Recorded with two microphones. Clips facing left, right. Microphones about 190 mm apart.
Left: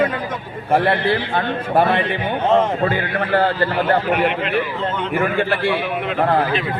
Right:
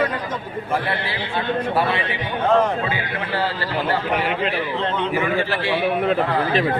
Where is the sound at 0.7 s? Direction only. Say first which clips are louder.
Left 9 dB; 55° left (ahead or behind).